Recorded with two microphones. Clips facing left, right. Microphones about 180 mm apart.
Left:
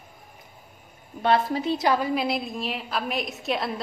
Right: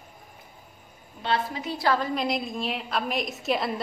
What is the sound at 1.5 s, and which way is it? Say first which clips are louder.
Speech: left 3 dB; 25° left (ahead or behind).